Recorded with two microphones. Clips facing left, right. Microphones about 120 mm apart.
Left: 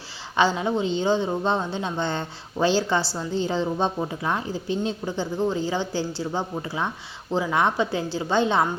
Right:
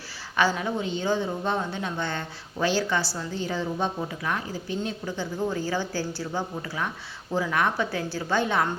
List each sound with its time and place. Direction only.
0.3 s a woman's voice: 25° left (ahead or behind)